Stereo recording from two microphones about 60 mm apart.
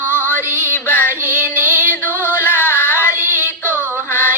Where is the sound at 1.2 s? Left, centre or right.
Right.